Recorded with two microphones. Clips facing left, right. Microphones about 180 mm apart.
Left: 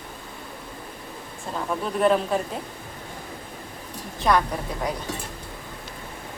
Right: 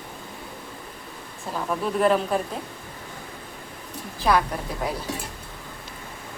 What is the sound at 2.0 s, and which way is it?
Speech, centre (ahead or behind).